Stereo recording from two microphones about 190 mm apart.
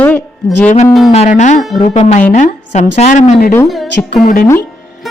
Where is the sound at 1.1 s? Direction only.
35° left (ahead or behind).